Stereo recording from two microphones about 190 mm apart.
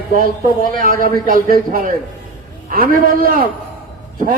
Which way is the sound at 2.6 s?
50° right (ahead or behind).